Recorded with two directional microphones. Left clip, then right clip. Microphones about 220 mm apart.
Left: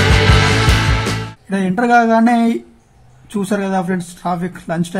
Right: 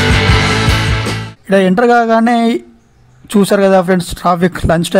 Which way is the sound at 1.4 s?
40° right (ahead or behind).